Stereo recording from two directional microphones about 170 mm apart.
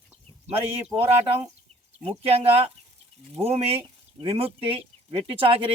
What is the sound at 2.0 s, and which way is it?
Speech, 35° right (ahead or behind).